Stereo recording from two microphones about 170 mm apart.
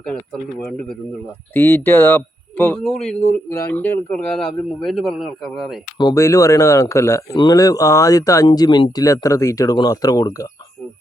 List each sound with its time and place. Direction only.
1.5 s speech: 15° left (ahead or behind)
6.0 s speech: 20° left (ahead or behind)